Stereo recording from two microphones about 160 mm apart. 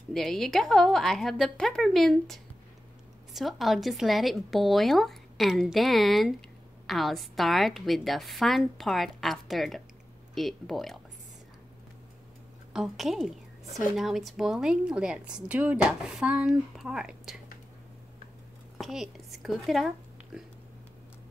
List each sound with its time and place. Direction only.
0.1 s a woman's voice: centre (ahead or behind)
12.7 s a woman's voice: centre (ahead or behind)
18.8 s a woman's voice: centre (ahead or behind)